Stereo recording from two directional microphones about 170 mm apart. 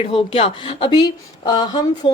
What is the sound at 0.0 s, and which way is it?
A woman's voice, 35° left (ahead or behind).